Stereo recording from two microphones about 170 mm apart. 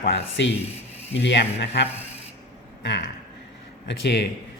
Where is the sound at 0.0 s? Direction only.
90° left.